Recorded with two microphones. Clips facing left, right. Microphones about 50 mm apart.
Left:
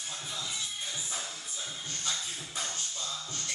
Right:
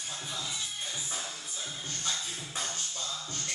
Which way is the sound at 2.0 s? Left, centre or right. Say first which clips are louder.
Even; centre.